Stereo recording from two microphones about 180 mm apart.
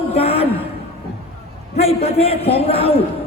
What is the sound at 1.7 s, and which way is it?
A man's voice, 35° left (ahead or behind).